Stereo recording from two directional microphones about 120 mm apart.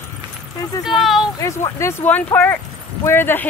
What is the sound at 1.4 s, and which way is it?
Speech, 25° left (ahead or behind).